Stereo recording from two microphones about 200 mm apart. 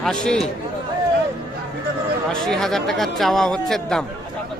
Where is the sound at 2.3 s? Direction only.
Centre (ahead or behind).